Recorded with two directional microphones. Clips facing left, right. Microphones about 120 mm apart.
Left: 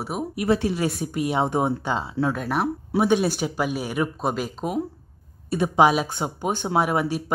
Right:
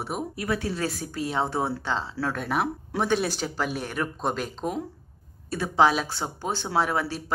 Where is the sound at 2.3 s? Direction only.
Centre (ahead or behind).